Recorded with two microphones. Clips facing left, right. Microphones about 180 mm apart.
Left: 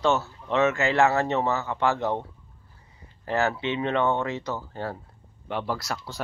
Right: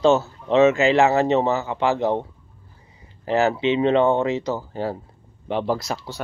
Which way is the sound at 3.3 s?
20° right (ahead or behind).